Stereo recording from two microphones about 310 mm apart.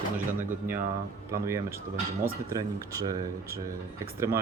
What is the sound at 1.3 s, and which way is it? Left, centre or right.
Speech, centre.